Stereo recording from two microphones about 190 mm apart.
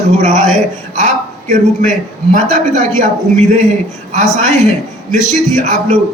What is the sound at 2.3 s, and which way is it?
A man's voice, 40° right (ahead or behind).